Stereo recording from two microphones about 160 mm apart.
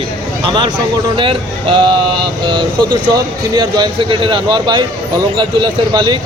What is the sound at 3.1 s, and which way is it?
Speech, 25° right (ahead or behind).